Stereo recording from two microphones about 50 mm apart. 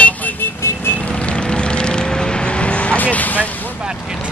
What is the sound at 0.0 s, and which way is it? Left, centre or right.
Vehicle, left.